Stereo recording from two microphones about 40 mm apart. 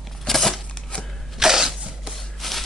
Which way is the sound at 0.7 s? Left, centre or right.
Centre.